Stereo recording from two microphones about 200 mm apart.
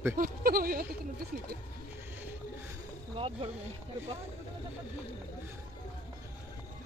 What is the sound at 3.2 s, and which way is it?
Speech, 30° right (ahead or behind).